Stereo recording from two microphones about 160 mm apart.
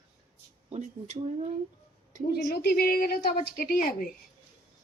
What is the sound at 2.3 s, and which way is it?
A woman's voice, 80° left.